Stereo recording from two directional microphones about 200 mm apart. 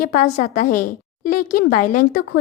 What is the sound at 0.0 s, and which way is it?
A woman's voice, 40° left (ahead or behind).